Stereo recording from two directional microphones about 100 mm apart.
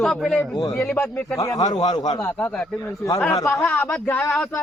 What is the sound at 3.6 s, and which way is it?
Speech, 15° left (ahead or behind).